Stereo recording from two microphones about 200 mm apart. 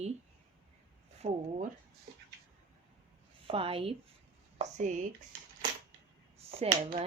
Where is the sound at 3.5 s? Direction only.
30° right (ahead or behind).